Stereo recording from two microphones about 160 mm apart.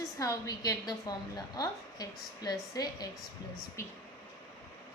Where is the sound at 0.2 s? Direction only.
20° left (ahead or behind).